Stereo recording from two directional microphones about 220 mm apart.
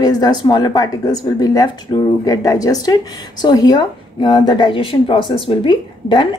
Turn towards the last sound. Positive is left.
turn(degrees=20)  # may be behind; listen again after turning